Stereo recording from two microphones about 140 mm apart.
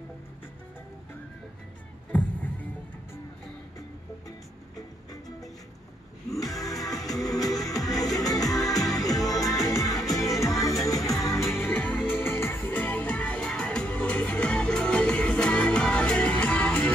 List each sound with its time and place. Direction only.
2.1 s music: 10° left (ahead or behind)
6.3 s music: 25° left (ahead or behind)
9.9 s music: centre (ahead or behind)
11.5 s music: 15° left (ahead or behind)